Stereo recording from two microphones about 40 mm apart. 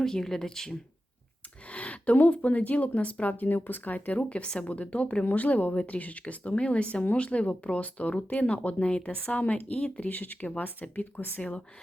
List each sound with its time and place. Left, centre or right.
0.0 s speech: centre
1.7 s a sound: left
2.1 s speech: left
4.2 s a woman's voice: left
10.1 s speech: left
11.3 s a woman's voice: left